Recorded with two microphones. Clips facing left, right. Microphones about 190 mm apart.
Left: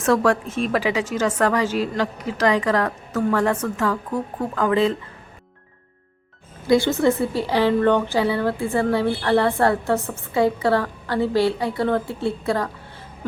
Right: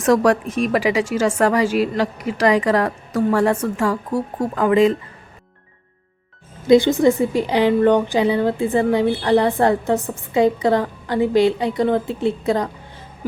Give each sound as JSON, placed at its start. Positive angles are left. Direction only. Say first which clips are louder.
{"t": 0.0, "sound": "a woman's voice", "louder": "right 3 dB", "side_deg": -15}
{"t": 6.7, "sound": "a woman's voice", "louder": "right 4 dB", "side_deg": -20}